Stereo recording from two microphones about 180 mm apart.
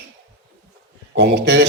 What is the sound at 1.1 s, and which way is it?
Speech, 70° right (ahead or behind).